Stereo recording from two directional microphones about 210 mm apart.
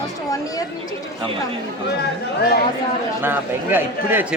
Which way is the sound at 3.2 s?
10° right (ahead or behind).